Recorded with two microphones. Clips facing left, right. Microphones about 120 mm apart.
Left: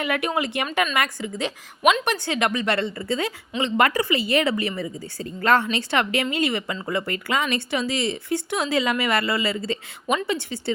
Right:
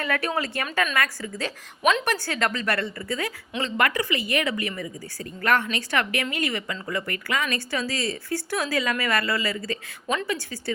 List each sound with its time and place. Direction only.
0.0 s speech: 15° left (ahead or behind)